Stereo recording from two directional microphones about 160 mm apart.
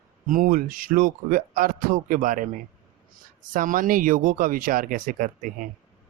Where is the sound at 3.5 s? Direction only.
55° right (ahead or behind).